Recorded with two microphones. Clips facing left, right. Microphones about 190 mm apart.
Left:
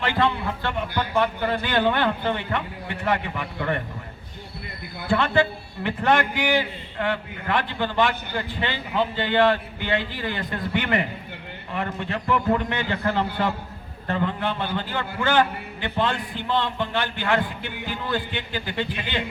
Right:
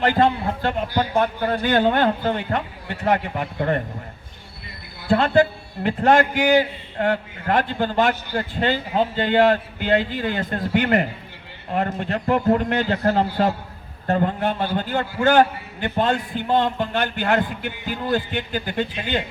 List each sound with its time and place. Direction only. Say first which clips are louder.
0.0 s a man's voice: right 5 dB; 45° right (ahead or behind)
5.1 s a man's voice: right 4 dB; 40° right (ahead or behind)